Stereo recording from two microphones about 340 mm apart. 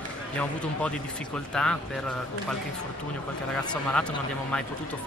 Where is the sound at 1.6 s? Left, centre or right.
Centre.